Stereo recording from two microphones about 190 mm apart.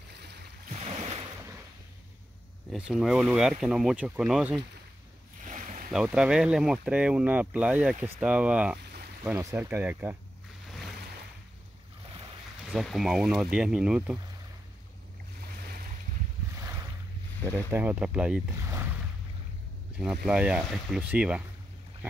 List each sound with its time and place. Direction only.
0.2 s boat: 60° right (ahead or behind)
0.7 s a sound: 35° right (ahead or behind)
2.7 s speech: centre (ahead or behind)
5.4 s boat: 40° right (ahead or behind)
5.9 s speech: 5° right (ahead or behind)
12.7 s speech: centre (ahead or behind)
17.6 s speech: 10° right (ahead or behind)
20.0 s speech: 5° right (ahead or behind)